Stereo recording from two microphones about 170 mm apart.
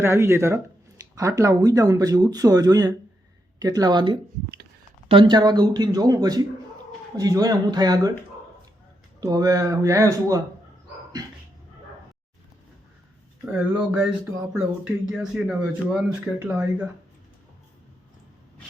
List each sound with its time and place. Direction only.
0.0 s speech: 15° right (ahead or behind)
9.2 s speech: 20° right (ahead or behind)
13.5 s speech: 5° right (ahead or behind)
15.1 s speech: 5° right (ahead or behind)